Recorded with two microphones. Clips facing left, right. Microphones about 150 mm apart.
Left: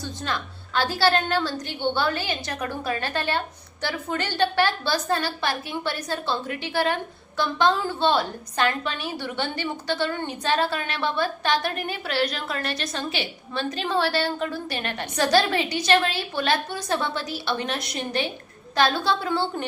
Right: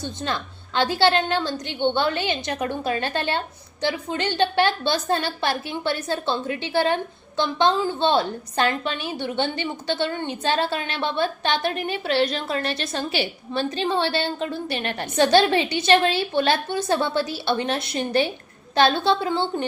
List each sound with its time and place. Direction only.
0.8 s a woman's voice: 20° right (ahead or behind)